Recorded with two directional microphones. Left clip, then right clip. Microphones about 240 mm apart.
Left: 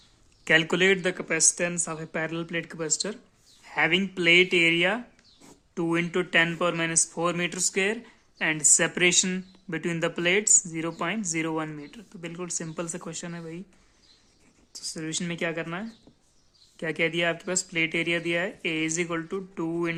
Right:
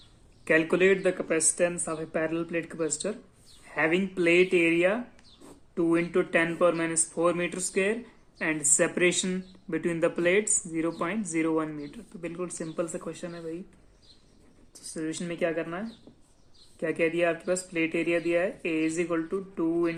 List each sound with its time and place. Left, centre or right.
0.4 s speech: left
14.9 s speech: left